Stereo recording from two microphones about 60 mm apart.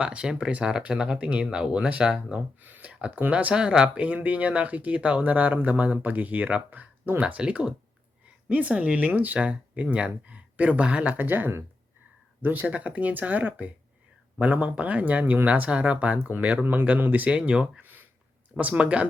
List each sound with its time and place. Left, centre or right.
0.0 s speech: centre
2.6 s speech: right
2.9 s speech: centre
3.5 s speech: centre